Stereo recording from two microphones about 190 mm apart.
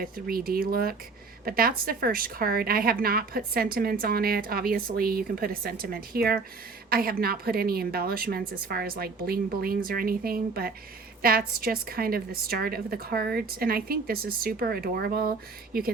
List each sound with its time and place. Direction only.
0.0 s a woman's voice: 50° right (ahead or behind)